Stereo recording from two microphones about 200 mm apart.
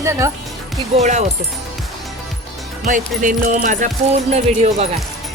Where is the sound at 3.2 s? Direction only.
40° right (ahead or behind).